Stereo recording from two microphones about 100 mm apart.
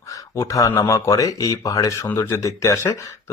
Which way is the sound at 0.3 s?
35° left (ahead or behind).